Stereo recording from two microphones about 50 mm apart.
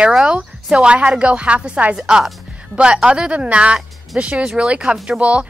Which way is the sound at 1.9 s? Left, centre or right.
Centre.